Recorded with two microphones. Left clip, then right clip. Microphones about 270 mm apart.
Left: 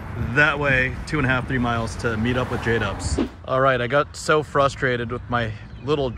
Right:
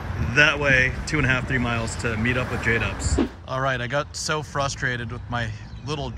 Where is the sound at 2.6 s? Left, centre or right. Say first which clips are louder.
Right 1 dB; left.